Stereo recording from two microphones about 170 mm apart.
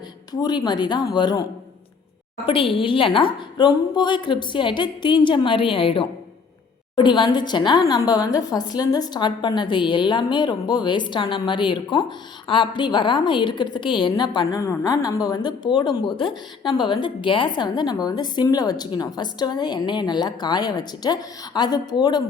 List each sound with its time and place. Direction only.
0.4 s a woman's voice: 25° left (ahead or behind)
2.5 s a woman's voice: 30° left (ahead or behind)